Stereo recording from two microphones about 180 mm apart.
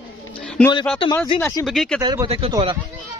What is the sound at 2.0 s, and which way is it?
Speech, 20° right (ahead or behind).